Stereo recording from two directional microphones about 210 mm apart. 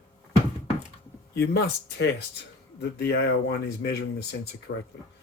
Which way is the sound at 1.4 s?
55° left (ahead or behind).